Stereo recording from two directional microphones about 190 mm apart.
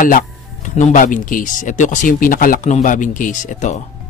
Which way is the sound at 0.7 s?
40° left (ahead or behind).